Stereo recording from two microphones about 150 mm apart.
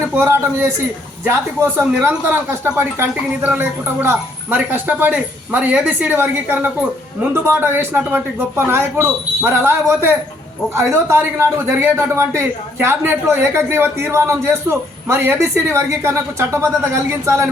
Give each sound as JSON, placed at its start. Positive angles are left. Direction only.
{"t": 0.1, "sound": "speech", "side_deg": -15}